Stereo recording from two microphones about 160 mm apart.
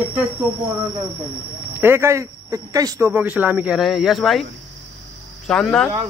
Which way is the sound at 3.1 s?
10° right (ahead or behind).